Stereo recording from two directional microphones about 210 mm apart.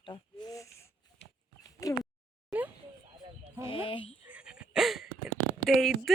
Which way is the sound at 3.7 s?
25° left (ahead or behind).